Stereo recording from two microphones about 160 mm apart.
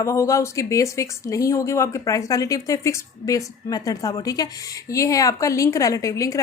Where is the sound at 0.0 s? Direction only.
20° left (ahead or behind).